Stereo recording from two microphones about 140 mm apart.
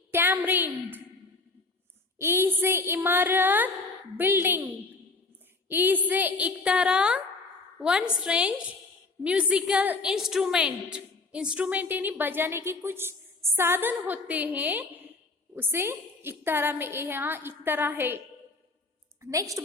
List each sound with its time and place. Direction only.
0.1 s a sound: 15° right (ahead or behind)
2.1 s a woman's voice: 15° right (ahead or behind)
5.6 s a woman's voice: 15° right (ahead or behind)
19.2 s a woman's voice: 25° right (ahead or behind)